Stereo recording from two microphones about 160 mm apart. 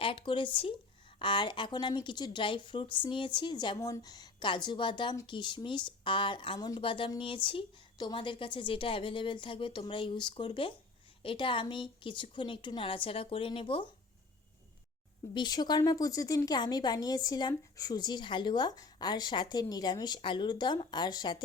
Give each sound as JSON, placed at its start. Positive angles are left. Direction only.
{"t": 0.0, "sound": "speech", "side_deg": 35}
{"t": 15.4, "sound": "speech", "side_deg": 25}